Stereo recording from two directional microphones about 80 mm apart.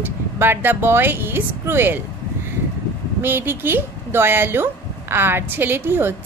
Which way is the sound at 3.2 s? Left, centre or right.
Right.